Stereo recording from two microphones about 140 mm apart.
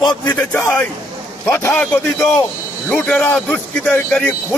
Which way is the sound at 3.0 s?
10° left (ahead or behind).